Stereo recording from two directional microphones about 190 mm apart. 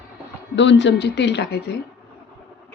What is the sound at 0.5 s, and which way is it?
A woman's voice, 70° left (ahead or behind).